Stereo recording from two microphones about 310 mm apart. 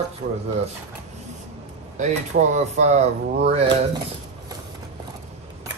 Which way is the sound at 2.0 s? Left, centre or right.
Right.